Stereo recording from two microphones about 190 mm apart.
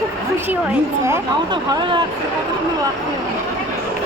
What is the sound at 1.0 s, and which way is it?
Speech, 20° right (ahead or behind).